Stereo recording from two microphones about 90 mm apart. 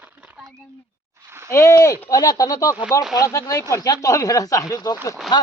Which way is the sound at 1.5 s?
35° left (ahead or behind).